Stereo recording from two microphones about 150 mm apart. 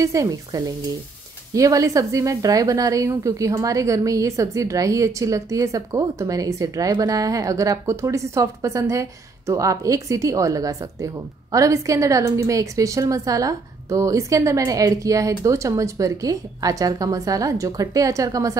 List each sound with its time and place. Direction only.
0.0 s a woman's voice: 20° right (ahead or behind)